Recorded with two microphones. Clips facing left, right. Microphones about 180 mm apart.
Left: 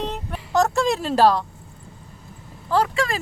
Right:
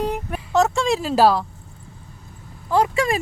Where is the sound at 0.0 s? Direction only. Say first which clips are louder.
Right 4 dB; 10° right (ahead or behind).